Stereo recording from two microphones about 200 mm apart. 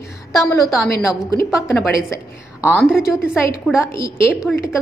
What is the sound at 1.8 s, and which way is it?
Speech, 5° right (ahead or behind).